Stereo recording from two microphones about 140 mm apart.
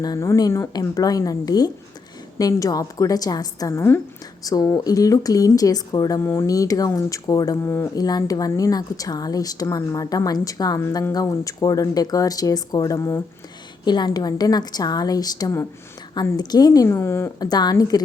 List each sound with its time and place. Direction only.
0.0 s speech: 25° left (ahead or behind)
7.9 s speech: 25° left (ahead or behind)
10.8 s speech: 15° left (ahead or behind)